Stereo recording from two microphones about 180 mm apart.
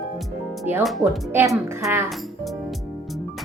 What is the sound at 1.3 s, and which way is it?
Speech, 15° right (ahead or behind).